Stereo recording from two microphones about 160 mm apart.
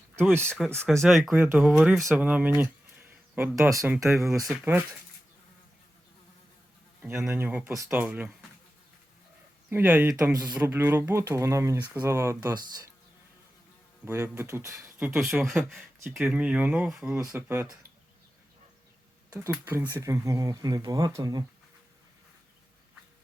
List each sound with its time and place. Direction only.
0.2 s speech: 15° right (ahead or behind)
0.4 s speech: 5° left (ahead or behind)
1.3 s speech: 10° right (ahead or behind)
7.0 s speech: 15° right (ahead or behind)
9.6 s speech: 10° right (ahead or behind)
10.3 s speech: 25° right (ahead or behind)
14.0 s speech: 15° right (ahead or behind)
19.3 s speech: 15° right (ahead or behind)